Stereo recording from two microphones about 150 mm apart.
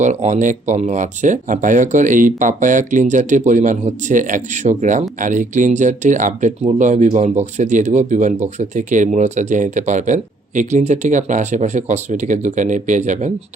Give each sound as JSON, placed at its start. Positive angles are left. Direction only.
{"t": 0.0, "sound": "speech", "side_deg": -50}